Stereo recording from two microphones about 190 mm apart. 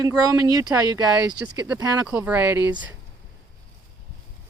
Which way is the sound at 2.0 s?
10° right (ahead or behind).